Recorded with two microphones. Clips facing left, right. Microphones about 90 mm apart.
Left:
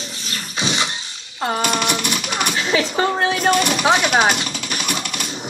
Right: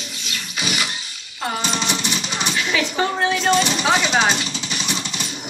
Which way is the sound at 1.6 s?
55° left (ahead or behind).